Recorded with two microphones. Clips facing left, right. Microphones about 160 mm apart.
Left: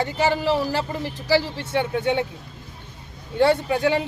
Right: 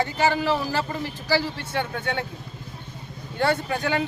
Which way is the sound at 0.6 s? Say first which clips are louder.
Left 2 dB; 25° left (ahead or behind).